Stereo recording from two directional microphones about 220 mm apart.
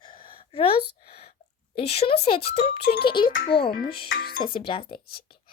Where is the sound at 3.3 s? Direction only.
35° left (ahead or behind).